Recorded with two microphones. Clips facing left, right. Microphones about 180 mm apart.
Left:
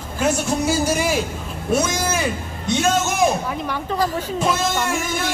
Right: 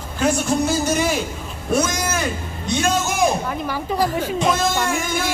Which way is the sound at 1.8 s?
25° left (ahead or behind).